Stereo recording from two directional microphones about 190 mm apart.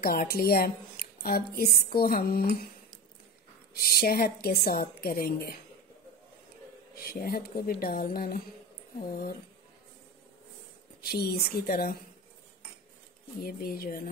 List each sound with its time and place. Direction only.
0.0 s a woman's voice: 50° left (ahead or behind)
3.7 s a woman's voice: 55° left (ahead or behind)
7.0 s a woman's voice: 50° left (ahead or behind)
11.0 s a woman's voice: 55° left (ahead or behind)
13.4 s a woman's voice: 55° left (ahead or behind)